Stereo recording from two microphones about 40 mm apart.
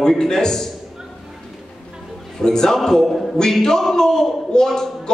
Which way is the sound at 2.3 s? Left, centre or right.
Centre.